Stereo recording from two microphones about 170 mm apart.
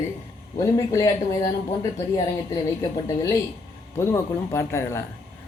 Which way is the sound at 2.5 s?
20° left (ahead or behind).